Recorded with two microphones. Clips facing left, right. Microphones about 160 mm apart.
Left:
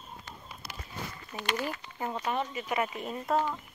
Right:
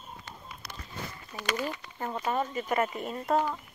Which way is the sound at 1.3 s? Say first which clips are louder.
Left 2 dB; 20° left (ahead or behind).